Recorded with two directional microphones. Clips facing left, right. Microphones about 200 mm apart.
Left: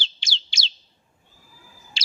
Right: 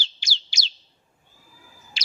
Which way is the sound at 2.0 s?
30° left (ahead or behind).